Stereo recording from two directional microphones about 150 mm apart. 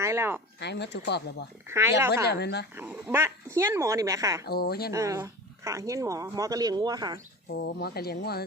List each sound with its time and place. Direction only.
0.0 s speech: 15° right (ahead or behind)
0.7 s speech: 90° left
1.6 s speech: 15° right (ahead or behind)
2.2 s speech: 90° left
2.7 s speech: 10° right (ahead or behind)
4.4 s speech: 90° left
4.9 s speech: 20° right (ahead or behind)
7.5 s speech: 90° left